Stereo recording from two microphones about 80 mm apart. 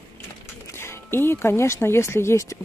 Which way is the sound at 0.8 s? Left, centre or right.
Left.